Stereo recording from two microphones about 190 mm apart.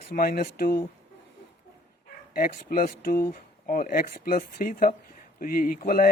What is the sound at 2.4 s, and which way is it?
Speech, 50° left (ahead or behind).